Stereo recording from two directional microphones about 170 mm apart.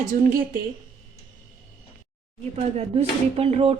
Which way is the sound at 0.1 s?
55° right (ahead or behind).